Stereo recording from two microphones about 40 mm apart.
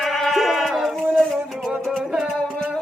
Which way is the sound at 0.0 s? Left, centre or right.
Centre.